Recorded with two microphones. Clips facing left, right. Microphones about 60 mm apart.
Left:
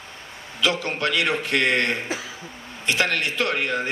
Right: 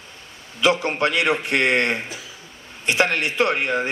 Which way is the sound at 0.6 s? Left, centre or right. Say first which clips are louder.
Right 4 dB; right.